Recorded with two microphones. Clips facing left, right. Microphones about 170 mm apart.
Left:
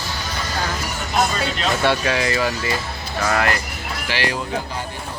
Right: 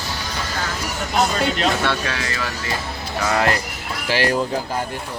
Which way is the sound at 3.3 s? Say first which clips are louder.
Right 1 dB; 25° right (ahead or behind).